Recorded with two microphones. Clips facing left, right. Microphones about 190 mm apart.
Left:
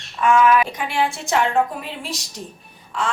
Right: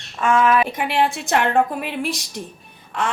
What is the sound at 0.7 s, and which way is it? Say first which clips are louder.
A woman's voice: right 2 dB; 60° right (ahead or behind).